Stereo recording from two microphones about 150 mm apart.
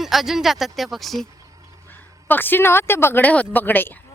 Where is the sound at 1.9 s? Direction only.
15° left (ahead or behind).